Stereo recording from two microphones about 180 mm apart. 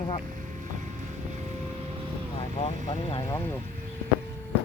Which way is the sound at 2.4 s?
35° left (ahead or behind).